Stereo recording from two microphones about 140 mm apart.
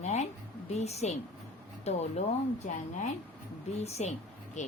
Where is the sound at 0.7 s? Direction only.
50° left (ahead or behind).